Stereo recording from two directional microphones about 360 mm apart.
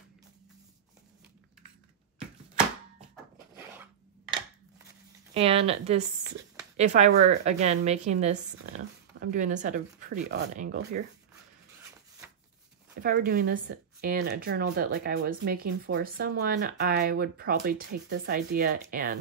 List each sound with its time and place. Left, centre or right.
5.3 s speech: centre
13.0 s speech: right